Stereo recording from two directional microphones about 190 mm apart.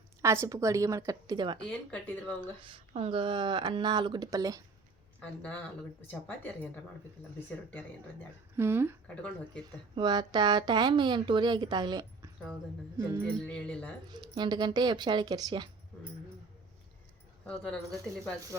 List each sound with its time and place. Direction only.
0.2 s a woman's voice: 15° right (ahead or behind)
1.5 s speech: 5° left (ahead or behind)
2.6 s a woman's voice: 30° right (ahead or behind)
5.2 s speech: 10° left (ahead or behind)
8.5 s a woman's voice: 10° right (ahead or behind)
9.9 s a woman's voice: 25° right (ahead or behind)
13.5 s speech: 5° left (ahead or behind)
14.1 s a woman's voice: 20° right (ahead or behind)
17.4 s speech: 5° left (ahead or behind)